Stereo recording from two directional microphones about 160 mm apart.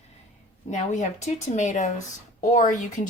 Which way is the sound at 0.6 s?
45° left (ahead or behind).